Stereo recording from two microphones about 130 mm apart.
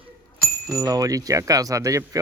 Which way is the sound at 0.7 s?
25° right (ahead or behind).